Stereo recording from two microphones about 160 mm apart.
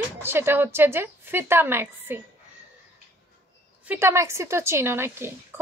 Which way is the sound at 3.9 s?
15° right (ahead or behind).